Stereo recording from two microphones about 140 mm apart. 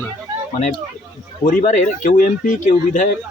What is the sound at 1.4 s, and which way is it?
Speech, 75° left (ahead or behind).